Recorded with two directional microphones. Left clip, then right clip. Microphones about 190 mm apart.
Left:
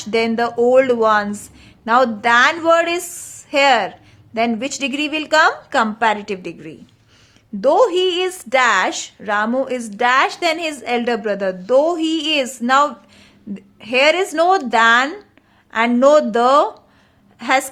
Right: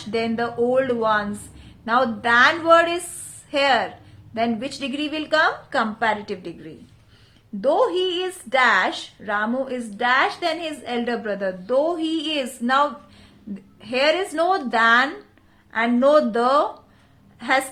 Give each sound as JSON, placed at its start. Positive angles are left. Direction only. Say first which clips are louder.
{"t": 0.0, "sound": "a woman's voice", "louder": "left 6 dB", "side_deg": 35}